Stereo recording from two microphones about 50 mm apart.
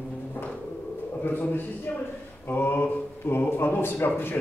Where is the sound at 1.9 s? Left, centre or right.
Left.